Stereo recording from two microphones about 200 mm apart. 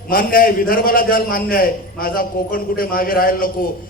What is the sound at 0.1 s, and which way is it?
A man's voice, 45° left (ahead or behind).